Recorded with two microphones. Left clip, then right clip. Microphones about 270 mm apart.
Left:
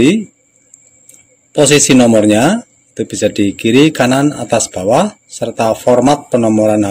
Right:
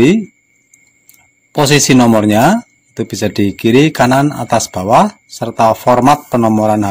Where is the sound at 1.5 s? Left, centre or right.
Right.